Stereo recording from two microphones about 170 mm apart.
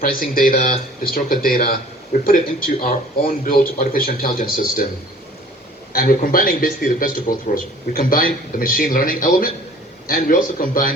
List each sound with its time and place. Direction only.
0.0 s a man's voice: 55° left (ahead or behind)
5.9 s a man's voice: 60° left (ahead or behind)